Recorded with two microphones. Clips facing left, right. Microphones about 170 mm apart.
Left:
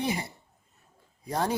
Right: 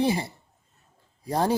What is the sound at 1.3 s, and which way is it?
Speech, 35° right (ahead or behind).